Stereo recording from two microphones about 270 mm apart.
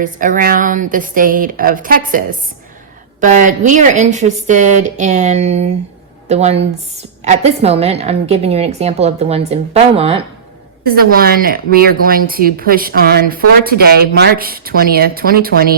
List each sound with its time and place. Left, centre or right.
0.0 s a woman's voice: right
10.8 s a woman's voice: right